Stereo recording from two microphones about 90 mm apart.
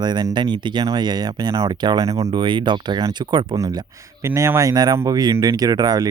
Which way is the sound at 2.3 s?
60° right (ahead or behind).